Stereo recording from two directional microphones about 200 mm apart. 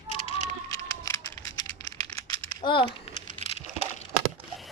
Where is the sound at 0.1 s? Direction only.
30° left (ahead or behind).